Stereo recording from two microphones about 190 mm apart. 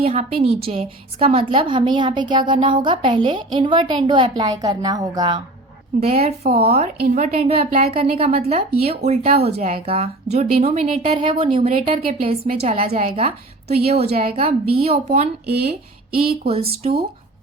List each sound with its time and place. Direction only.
0.0 s a woman's voice: 35° right (ahead or behind)
6.0 s a woman's voice: 30° right (ahead or behind)
15.4 s speech: 55° right (ahead or behind)
16.5 s a woman's voice: 30° right (ahead or behind)